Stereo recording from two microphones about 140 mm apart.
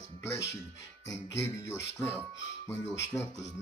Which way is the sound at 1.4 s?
20° left (ahead or behind).